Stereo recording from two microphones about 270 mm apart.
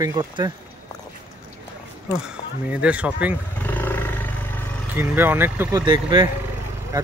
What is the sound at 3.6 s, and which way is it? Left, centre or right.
Roar, centre.